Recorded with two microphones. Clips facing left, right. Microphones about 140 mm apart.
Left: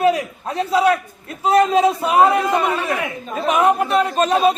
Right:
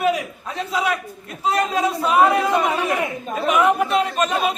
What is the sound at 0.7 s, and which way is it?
Speech, 30° left (ahead or behind).